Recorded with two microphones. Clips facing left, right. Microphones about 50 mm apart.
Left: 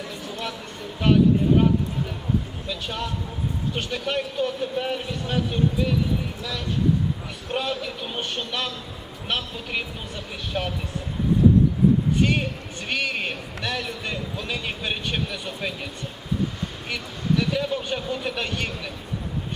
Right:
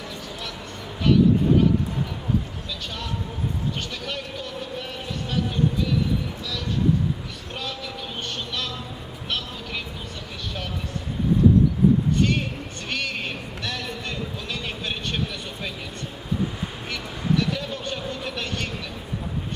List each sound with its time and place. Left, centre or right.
1.0 s speech: left
2.6 s speech: centre
7.5 s speech: centre
12.9 s speech: centre
16.9 s speech: centre